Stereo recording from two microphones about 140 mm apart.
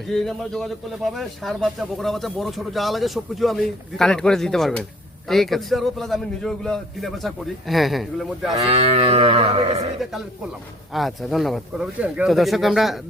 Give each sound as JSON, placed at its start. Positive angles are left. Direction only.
{"t": 0.1, "sound": "speech", "side_deg": 5}
{"t": 8.6, "sound": "cattle", "side_deg": -45}
{"t": 10.9, "sound": "speech", "side_deg": 0}